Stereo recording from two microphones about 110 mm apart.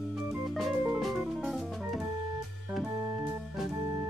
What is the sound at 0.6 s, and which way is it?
Music, centre (ahead or behind).